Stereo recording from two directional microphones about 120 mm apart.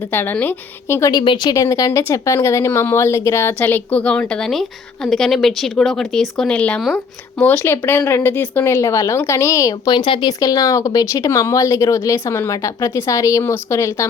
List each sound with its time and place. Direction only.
0.1 s a woman's voice: 15° left (ahead or behind)
1.1 s speech: 40° left (ahead or behind)
1.5 s speech: 30° left (ahead or behind)